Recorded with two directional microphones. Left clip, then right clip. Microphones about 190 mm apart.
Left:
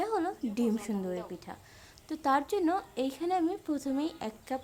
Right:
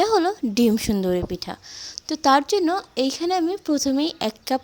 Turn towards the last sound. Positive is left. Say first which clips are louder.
# right 13 dB
turn(degrees=-40)  # may be behind; listen again after turning